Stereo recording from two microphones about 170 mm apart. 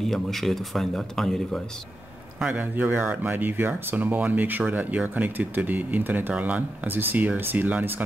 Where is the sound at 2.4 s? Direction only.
10° right (ahead or behind).